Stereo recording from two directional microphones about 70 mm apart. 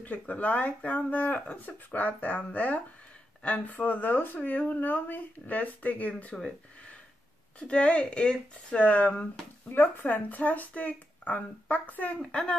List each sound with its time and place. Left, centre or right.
0.0 s speech: left
7.5 s speech: centre
12.2 s speech: centre